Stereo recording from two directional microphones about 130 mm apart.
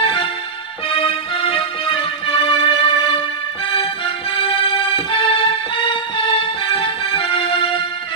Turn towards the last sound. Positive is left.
turn(degrees=40)  # may be behind; listen again after turning